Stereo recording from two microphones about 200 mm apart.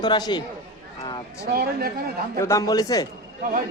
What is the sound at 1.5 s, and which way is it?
Speech, 50° right (ahead or behind).